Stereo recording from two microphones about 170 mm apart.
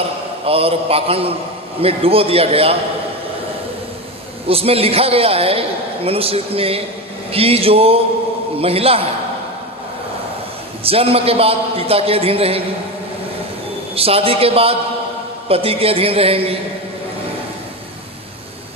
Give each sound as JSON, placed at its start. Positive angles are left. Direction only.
{"t": 0.4, "sound": "a man's voice", "side_deg": -35}
{"t": 4.4, "sound": "a man's voice", "side_deg": -35}
{"t": 10.8, "sound": "a man's voice", "side_deg": -35}
{"t": 13.9, "sound": "a man's voice", "side_deg": -35}